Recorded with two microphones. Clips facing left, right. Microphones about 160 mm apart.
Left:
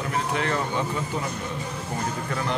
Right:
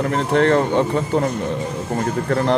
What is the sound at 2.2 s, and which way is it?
Speech, 60° right (ahead or behind).